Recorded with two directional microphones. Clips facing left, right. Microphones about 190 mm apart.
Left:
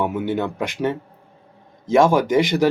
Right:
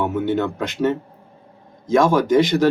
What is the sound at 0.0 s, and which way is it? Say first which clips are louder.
Speech: right 2 dB; 15° left (ahead or behind).